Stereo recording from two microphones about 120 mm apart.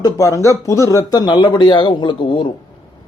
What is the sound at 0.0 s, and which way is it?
Speech, 25° left (ahead or behind).